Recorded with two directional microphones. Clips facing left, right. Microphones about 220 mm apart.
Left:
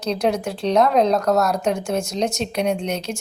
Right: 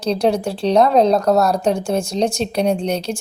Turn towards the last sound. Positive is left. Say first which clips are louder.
# right 4 dB
turn(degrees=-30)  # may be behind; listen again after turning